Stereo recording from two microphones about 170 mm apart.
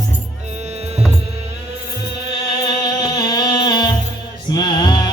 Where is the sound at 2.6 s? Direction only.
25° left (ahead or behind).